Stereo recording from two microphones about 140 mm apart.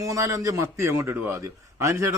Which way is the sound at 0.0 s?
20° right (ahead or behind).